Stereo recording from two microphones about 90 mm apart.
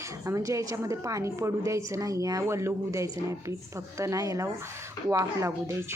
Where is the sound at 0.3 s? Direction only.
35° right (ahead or behind).